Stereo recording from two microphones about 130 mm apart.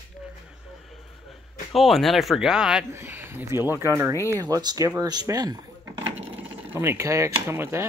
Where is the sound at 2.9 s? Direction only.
15° right (ahead or behind).